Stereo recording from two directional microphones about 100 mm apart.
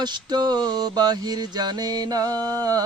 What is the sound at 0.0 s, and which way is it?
Speech, 45° right (ahead or behind).